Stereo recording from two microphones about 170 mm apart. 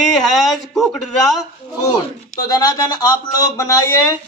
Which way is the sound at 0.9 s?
Centre (ahead or behind).